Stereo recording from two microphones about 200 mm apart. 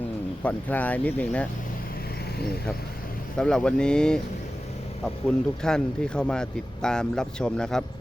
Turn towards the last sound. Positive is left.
turn(degrees=5)  # may be behind; listen again after turning